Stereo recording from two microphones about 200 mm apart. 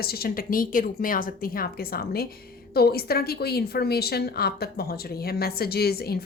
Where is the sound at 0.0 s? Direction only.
50° left (ahead or behind).